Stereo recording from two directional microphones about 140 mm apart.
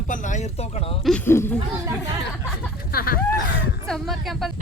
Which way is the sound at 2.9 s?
90° left.